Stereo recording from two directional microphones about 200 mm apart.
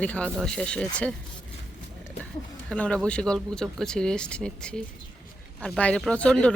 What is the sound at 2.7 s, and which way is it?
Speech, 5° left (ahead or behind).